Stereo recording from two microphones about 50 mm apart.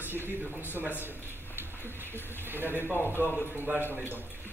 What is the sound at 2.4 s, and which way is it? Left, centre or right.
Speech, right.